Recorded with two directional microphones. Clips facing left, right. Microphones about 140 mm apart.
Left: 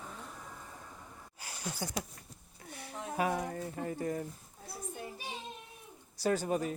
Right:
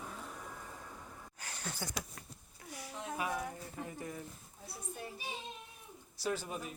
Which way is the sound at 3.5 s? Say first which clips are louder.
Left 7 dB; 55° left (ahead or behind).